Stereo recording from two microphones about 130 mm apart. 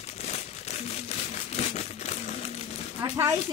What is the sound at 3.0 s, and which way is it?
Speech, 25° right (ahead or behind).